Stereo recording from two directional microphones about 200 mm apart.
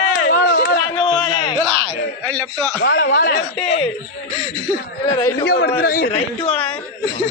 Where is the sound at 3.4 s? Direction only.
25° left (ahead or behind).